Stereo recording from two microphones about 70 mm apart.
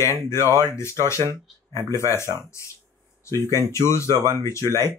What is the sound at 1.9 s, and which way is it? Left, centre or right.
Speech, left.